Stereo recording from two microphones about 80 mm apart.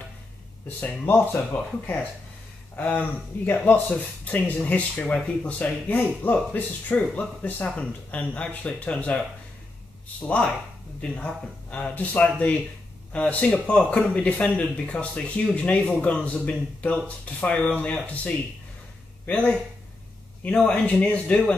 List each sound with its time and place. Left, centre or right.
0.7 s speech: left
10.2 s speech: centre